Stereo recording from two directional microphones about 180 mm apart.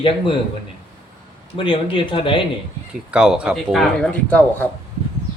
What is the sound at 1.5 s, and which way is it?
Speech, 30° left (ahead or behind).